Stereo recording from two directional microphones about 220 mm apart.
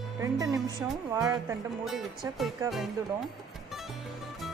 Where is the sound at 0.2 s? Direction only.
15° right (ahead or behind).